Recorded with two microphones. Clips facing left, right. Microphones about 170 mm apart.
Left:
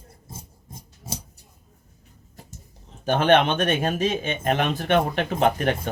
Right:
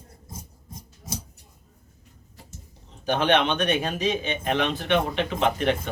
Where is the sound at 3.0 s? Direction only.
50° left (ahead or behind).